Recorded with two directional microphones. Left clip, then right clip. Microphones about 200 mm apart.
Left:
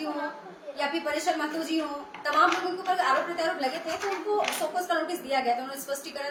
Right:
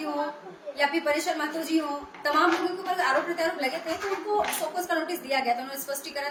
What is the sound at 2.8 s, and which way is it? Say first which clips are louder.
Speech: left 2 dB; 25° right (ahead or behind).